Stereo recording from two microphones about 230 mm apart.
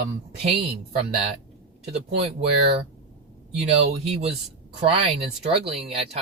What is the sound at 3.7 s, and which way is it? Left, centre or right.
Speech, right.